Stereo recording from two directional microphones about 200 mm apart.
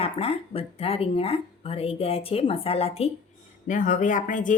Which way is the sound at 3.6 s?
40° left (ahead or behind).